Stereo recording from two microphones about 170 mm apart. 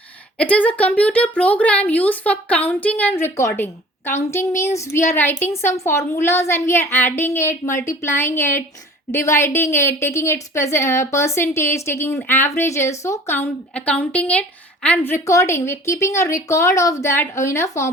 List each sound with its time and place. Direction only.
0.3 s speech: 10° left (ahead or behind)